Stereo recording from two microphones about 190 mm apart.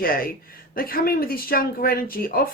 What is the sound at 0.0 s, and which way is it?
Speech, 50° left (ahead or behind).